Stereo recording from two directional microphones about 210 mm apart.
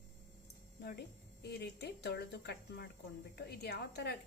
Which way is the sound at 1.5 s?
50° left (ahead or behind).